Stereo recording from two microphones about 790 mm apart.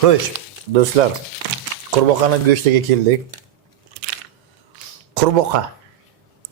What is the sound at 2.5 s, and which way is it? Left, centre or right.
Speech, right.